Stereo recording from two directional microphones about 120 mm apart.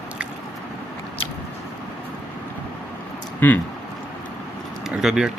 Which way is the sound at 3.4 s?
15° left (ahead or behind).